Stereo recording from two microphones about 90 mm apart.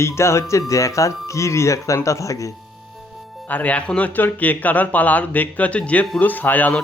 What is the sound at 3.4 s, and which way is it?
Speech, 20° left (ahead or behind).